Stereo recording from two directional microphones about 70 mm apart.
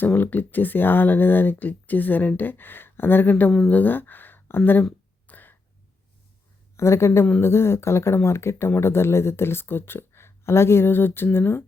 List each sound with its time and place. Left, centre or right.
0.0 s speech: left
5.2 s a sound: left
6.7 s speech: left